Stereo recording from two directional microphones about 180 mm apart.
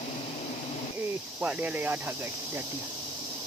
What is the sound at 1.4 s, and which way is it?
Speech, 10° right (ahead or behind).